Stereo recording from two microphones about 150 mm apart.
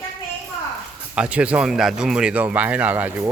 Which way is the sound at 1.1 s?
10° right (ahead or behind).